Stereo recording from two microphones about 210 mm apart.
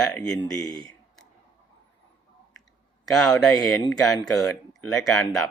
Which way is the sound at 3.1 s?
Centre (ahead or behind).